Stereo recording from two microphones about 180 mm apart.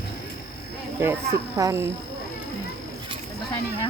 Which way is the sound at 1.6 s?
20° right (ahead or behind).